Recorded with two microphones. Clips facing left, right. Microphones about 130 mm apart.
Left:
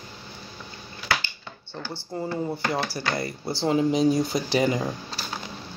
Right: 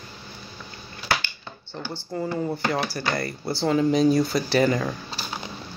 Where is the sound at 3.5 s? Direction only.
20° left (ahead or behind).